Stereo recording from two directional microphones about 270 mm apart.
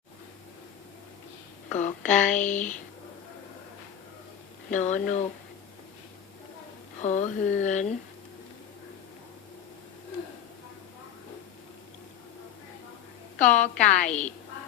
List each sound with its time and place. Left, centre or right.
1.7 s speech: left
4.7 s speech: left
7.0 s speech: left
13.4 s speech: left
14.0 s a woman's voice: centre